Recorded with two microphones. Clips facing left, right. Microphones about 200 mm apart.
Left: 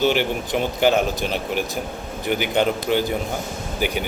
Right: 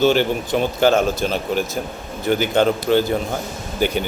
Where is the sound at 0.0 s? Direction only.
15° left (ahead or behind).